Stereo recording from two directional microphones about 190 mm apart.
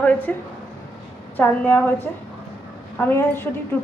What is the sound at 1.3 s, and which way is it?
A woman's voice, 10° left (ahead or behind).